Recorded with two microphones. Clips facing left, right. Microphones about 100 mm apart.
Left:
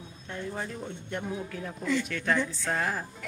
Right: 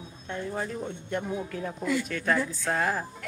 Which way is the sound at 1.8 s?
5° right (ahead or behind).